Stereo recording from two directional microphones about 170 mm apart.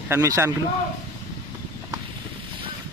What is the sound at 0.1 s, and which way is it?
Speech, 15° right (ahead or behind).